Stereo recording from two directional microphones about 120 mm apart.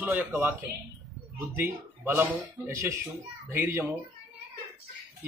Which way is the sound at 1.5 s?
20° right (ahead or behind).